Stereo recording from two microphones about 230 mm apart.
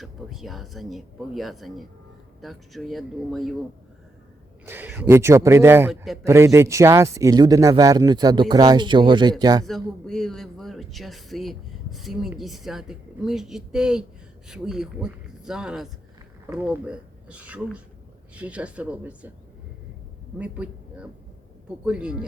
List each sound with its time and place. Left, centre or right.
0.0 s speech: centre
4.6 s speech: centre
9.6 s speech: centre
20.4 s a man's voice: centre